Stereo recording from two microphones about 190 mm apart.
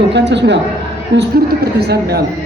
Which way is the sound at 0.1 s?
65° right (ahead or behind).